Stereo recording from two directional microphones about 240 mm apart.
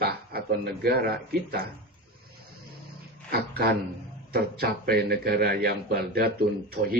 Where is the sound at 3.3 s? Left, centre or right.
Right.